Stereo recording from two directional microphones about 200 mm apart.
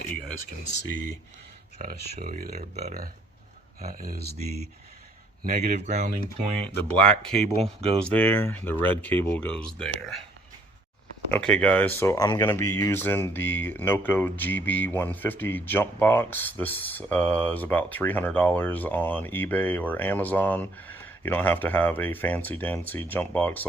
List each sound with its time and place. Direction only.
0.9 s speech: 40° right (ahead or behind)
2.6 s speech: 35° right (ahead or behind)
3.8 s speech: 45° right (ahead or behind)
5.4 s speech: 45° right (ahead or behind)
6.6 s speech: 5° left (ahead or behind)
11.3 s speech: 5° left (ahead or behind)